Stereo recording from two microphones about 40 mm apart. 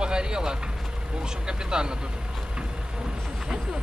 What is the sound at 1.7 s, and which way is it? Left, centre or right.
Speech, centre.